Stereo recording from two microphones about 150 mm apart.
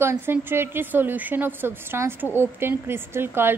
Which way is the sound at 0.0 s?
15° right (ahead or behind).